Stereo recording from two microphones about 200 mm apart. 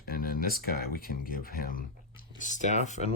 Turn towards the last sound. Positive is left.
turn(degrees=35)  # may be behind; listen again after turning